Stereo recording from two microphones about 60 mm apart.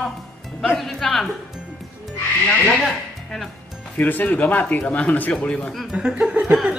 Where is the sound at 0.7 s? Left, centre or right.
Centre.